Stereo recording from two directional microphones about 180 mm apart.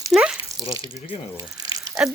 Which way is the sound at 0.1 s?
5° right (ahead or behind).